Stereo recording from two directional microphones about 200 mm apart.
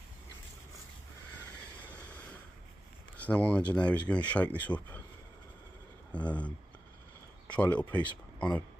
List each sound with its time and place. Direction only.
3.2 s speech: 5° left (ahead or behind)
6.1 s speech: 5° left (ahead or behind)
7.5 s speech: 5° left (ahead or behind)